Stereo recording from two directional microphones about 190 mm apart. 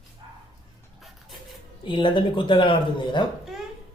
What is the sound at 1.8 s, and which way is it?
Speech, 25° left (ahead or behind).